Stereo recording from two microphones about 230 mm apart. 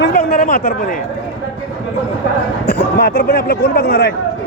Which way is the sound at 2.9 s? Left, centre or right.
Left.